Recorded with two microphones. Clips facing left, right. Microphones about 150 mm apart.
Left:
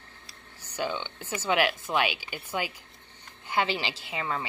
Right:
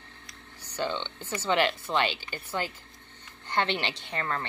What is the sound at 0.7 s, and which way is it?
A woman's voice, 10° left (ahead or behind).